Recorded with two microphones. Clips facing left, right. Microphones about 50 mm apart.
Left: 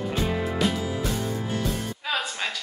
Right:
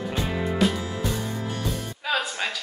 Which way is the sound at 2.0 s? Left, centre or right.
Centre.